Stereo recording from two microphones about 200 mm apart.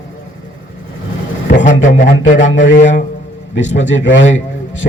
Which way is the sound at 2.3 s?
65° left (ahead or behind).